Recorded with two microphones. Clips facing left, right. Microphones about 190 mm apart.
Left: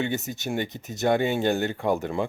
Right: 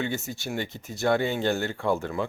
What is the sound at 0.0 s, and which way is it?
Speech, 20° left (ahead or behind).